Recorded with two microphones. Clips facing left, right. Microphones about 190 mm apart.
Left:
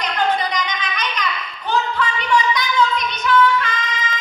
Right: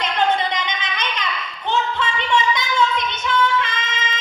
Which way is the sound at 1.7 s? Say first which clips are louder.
Left 1 dB; 25° right (ahead or behind).